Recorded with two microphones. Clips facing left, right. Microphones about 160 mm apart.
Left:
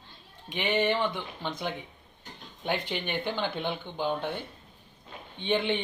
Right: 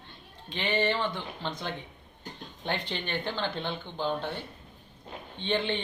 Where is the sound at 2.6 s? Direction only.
10° left (ahead or behind).